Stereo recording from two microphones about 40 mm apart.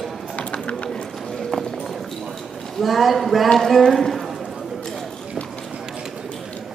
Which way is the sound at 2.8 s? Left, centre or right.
Centre.